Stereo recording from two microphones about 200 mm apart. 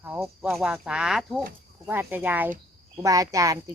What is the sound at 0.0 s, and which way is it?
Speech, 10° right (ahead or behind).